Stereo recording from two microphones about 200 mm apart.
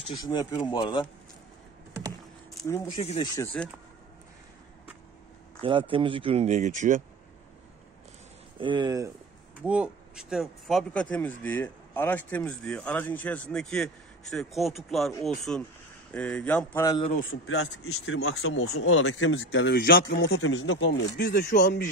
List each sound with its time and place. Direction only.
0.1 s speech: 20° left (ahead or behind)
2.7 s speech: 15° left (ahead or behind)
3.0 s speech: 30° left (ahead or behind)
3.6 s speech: 5° left (ahead or behind)
5.6 s speech: 25° right (ahead or behind)
8.5 s speech: 25° right (ahead or behind)
9.6 s speech: 5° right (ahead or behind)
16.8 s speech: 20° left (ahead or behind)
17.5 s speech: 90° left; by 20.2 s 50° left (ahead or behind)
20.2 s speech: 90° left; by 21.8 s 40° left (ahead or behind)